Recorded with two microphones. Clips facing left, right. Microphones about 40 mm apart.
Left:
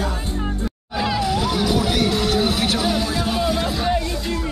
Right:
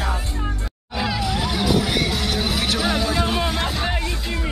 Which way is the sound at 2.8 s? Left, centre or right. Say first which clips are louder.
Even; centre.